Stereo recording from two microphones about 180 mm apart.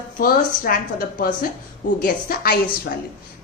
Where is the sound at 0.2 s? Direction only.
55° left (ahead or behind).